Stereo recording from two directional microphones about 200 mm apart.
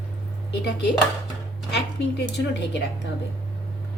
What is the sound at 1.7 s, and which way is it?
A woman's voice, 60° left (ahead or behind).